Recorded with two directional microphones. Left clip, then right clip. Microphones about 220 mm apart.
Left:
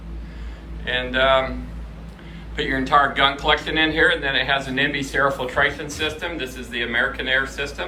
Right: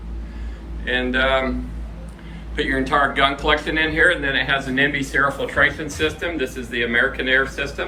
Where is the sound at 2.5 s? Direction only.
5° left (ahead or behind).